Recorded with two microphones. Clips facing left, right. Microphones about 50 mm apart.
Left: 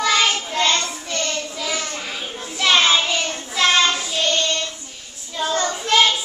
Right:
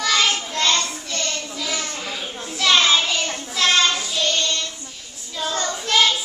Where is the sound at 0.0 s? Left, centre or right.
Centre.